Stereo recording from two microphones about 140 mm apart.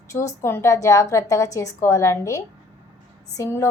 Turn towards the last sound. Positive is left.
turn(degrees=20)  # may be behind; listen again after turning